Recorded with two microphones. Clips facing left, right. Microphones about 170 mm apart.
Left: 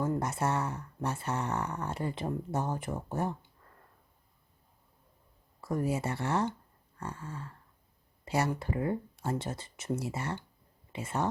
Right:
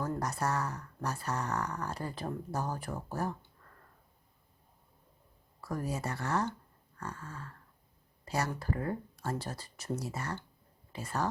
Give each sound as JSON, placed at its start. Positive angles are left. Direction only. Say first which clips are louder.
{"t": 0.0, "sound": "speech", "louder": "left 3 dB", "side_deg": 25}
{"t": 5.5, "sound": "speech", "louder": "left 5 dB", "side_deg": 25}